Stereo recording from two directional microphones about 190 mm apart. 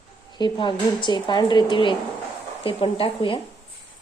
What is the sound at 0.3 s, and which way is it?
Speech, 25° left (ahead or behind).